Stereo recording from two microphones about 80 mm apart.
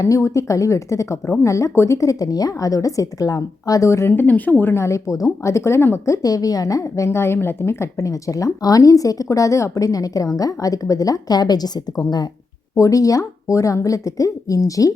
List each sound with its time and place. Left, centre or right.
0.0 s speech: left
4.1 s speech: left
6.2 s speech: left
12.7 s speech: left